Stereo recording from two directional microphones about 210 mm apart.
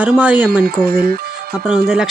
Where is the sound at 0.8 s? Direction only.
45° right (ahead or behind).